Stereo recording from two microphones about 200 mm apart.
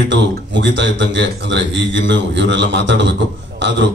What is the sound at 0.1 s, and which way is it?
A man's voice, 65° right (ahead or behind).